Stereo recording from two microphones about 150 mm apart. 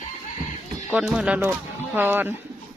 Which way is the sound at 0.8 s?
5° right (ahead or behind).